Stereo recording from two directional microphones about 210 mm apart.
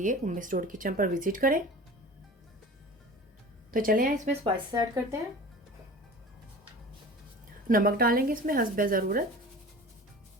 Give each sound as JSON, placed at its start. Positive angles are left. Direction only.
{"t": 0.0, "sound": "speech", "side_deg": -40}
{"t": 3.7, "sound": "speech", "side_deg": -40}
{"t": 4.4, "sound": "speech", "side_deg": -20}
{"t": 7.7, "sound": "a woman's voice", "side_deg": -40}